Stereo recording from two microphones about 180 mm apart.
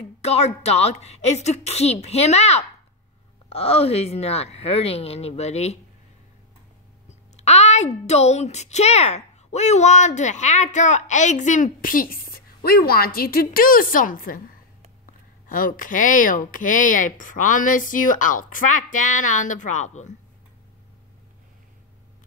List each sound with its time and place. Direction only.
0.2 s a child's voice: 35° left (ahead or behind)
7.3 s a child's voice: 35° left (ahead or behind)
15.4 s speech: 50° left (ahead or behind)